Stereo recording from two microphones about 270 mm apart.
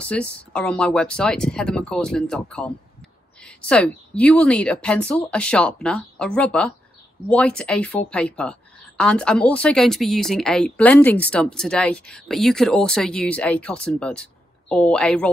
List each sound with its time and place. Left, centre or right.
0.0 s speech: centre